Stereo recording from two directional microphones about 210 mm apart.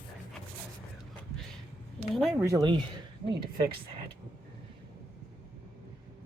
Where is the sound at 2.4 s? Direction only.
15° right (ahead or behind).